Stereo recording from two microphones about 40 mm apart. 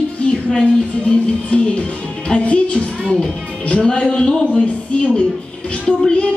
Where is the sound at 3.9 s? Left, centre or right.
Left.